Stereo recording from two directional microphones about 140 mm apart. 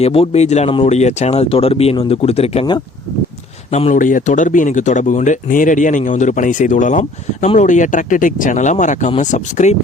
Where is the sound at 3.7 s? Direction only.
55° left (ahead or behind).